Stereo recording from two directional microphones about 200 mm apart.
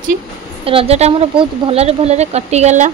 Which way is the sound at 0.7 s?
30° right (ahead or behind).